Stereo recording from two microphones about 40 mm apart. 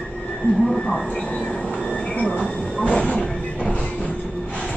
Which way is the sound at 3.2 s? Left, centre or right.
Left.